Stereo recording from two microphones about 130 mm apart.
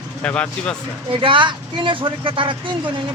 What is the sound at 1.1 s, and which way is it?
Speech, 40° right (ahead or behind).